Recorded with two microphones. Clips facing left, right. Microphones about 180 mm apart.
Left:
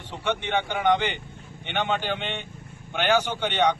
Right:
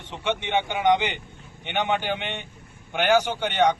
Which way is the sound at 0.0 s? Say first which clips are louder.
Even; 20° right (ahead or behind).